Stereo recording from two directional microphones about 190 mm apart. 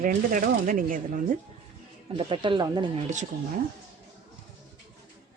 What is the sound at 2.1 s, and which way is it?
Speech, 25° right (ahead or behind).